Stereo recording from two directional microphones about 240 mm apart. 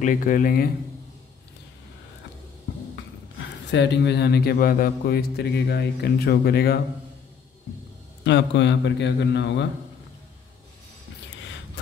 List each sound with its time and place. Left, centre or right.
0.0 s a man's voice: left
3.3 s a man's voice: left
8.2 s a man's voice: left